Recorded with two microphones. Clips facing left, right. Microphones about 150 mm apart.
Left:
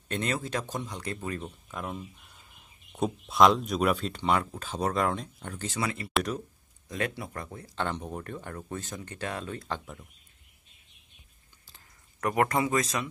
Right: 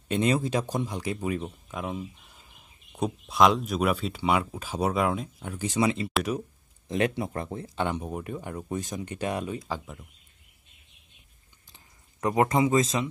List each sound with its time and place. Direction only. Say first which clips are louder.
0.1 s speech: right 6 dB; 15° right (ahead or behind)
6.1 s speech: right 2 dB; 5° right (ahead or behind)
6.9 s speech: right 6 dB; 20° right (ahead or behind)
7.7 s speech: right 2 dB; 10° right (ahead or behind)
11.7 s a sound: right 2 dB; 20° right (ahead or behind)